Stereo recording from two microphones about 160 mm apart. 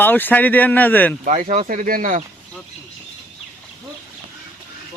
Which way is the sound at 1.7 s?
60° right (ahead or behind).